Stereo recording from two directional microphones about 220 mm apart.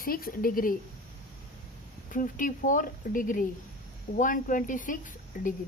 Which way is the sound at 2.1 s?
35° left (ahead or behind).